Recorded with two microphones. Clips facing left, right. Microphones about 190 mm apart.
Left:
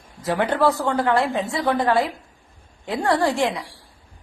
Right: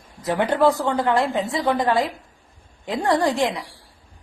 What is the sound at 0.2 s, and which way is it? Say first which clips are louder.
A man's voice: right 1 dB; 20° right (ahead or behind).